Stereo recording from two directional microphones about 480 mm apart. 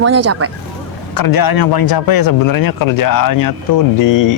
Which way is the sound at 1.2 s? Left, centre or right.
Left.